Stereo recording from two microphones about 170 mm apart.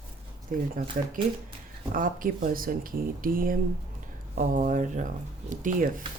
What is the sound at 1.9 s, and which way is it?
Speech, 55° right (ahead or behind).